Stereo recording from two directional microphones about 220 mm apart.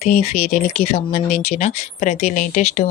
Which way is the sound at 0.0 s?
30° left (ahead or behind).